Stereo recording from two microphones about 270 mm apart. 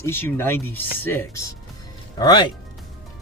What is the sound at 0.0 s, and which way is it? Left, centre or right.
Speech, centre.